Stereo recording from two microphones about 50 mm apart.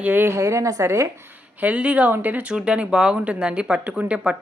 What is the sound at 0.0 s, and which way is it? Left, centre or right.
Speech, right.